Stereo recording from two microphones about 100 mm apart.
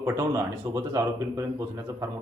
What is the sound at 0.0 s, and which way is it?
A man's voice, 30° right (ahead or behind).